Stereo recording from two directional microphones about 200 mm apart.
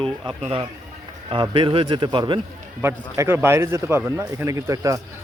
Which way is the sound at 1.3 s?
25° right (ahead or behind).